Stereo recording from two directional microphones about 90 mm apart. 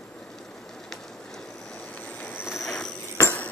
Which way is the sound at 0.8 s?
10° left (ahead or behind).